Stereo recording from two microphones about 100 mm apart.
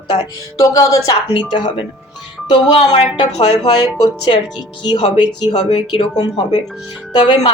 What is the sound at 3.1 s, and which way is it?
Speech, 45° left (ahead or behind).